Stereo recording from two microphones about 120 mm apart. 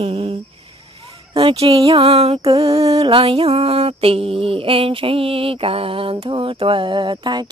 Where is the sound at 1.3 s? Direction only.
55° right (ahead or behind).